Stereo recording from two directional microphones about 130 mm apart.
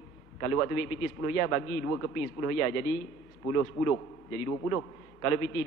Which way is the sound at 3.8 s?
25° left (ahead or behind).